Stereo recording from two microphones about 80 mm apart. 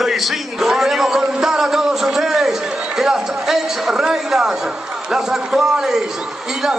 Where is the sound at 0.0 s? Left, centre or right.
Centre.